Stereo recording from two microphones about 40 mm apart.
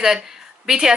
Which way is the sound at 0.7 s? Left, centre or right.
Centre.